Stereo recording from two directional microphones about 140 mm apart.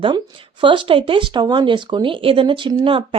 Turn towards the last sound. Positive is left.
turn(degrees=-35)  # may be behind; listen again after turning